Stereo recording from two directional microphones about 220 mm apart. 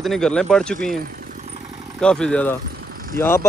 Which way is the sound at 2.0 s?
5° left (ahead or behind).